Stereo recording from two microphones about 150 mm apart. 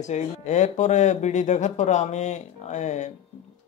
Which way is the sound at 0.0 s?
50° left (ahead or behind).